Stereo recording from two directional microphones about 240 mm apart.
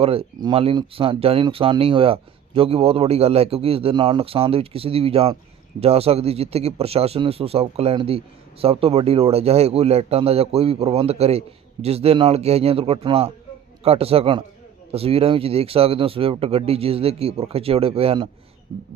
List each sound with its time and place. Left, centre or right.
0.0 s speech: right